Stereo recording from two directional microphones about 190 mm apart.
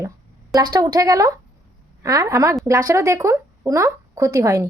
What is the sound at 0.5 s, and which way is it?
Speech, 20° right (ahead or behind).